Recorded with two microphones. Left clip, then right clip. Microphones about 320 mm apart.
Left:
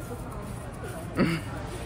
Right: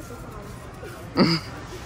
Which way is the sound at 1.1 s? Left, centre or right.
Centre.